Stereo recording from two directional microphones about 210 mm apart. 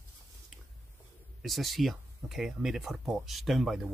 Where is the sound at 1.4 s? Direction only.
Centre (ahead or behind).